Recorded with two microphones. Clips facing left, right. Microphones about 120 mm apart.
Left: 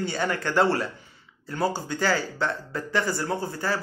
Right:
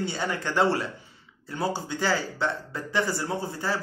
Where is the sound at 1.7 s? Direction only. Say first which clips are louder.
Left 1 dB; 20° right (ahead or behind).